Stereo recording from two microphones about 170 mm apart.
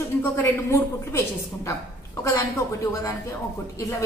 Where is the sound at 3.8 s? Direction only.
20° left (ahead or behind).